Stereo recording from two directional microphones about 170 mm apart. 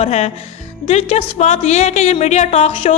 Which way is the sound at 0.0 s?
40° left (ahead or behind).